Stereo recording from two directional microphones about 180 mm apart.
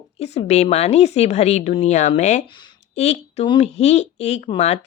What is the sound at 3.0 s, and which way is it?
Speech, 35° left (ahead or behind).